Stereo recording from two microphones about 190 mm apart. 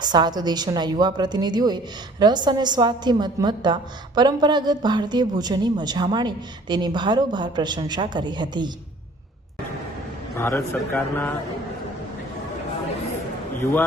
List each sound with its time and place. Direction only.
0.0 s a woman's voice: 20° right (ahead or behind)
10.3 s a man's voice: 15° left (ahead or behind)